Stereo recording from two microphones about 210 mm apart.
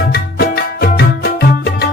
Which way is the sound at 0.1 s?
50° left (ahead or behind).